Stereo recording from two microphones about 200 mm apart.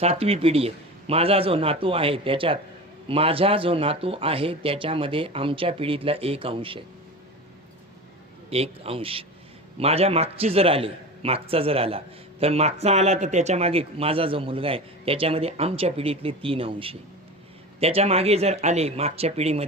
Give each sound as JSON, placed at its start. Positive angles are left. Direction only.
{"t": 0.0, "sound": "a man's voice", "side_deg": -30}
{"t": 8.4, "sound": "a man's voice", "side_deg": -30}